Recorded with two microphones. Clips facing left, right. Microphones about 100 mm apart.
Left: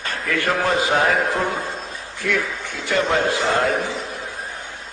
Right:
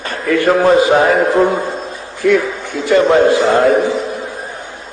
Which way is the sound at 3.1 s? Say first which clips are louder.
Right 9 dB; 30° right (ahead or behind).